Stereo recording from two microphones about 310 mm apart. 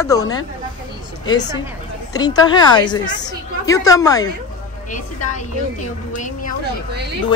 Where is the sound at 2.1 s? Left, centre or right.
Centre.